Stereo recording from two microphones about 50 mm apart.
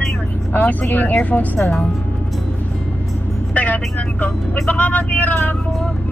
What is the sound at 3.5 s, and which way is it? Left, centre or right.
Speech, left.